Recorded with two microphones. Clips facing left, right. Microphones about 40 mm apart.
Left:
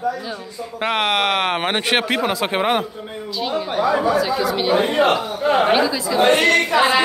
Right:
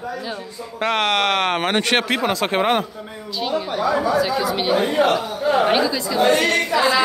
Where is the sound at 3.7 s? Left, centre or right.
Left.